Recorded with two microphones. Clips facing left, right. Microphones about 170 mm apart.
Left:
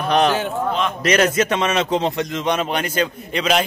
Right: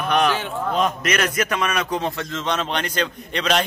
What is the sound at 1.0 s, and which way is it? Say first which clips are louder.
A man's voice: left 6 dB; 30° left (ahead or behind).